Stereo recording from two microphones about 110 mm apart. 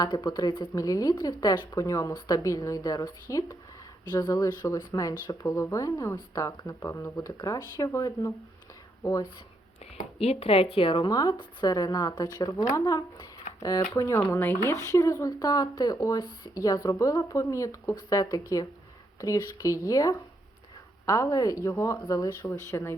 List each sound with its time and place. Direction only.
0.0 s speech: 40° left (ahead or behind)
0.8 s speech: 30° left (ahead or behind)
10.2 s speech: 65° left (ahead or behind); by 13.8 s 35° left (ahead or behind)
14.0 s speech: 25° left (ahead or behind)
22.7 s speech: 20° left (ahead or behind)